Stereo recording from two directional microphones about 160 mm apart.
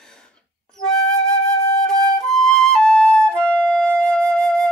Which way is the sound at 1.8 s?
5° left (ahead or behind).